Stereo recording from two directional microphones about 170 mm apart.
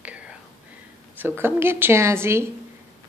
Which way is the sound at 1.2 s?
15° right (ahead or behind).